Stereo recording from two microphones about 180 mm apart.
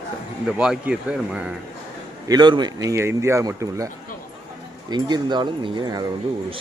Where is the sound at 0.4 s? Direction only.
5° right (ahead or behind).